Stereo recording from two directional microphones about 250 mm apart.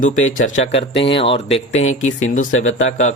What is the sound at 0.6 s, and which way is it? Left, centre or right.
Speech, left.